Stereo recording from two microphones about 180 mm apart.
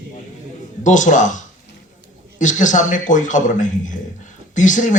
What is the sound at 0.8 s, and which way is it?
A man's voice, 45° left (ahead or behind).